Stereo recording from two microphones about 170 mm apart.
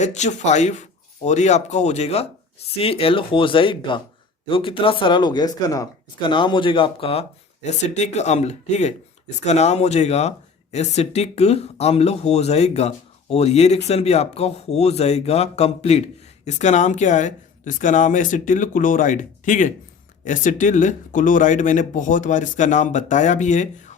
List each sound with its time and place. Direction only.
0.0 s speech: 45° left (ahead or behind)